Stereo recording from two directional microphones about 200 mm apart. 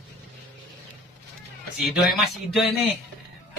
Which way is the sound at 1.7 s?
Centre (ahead or behind).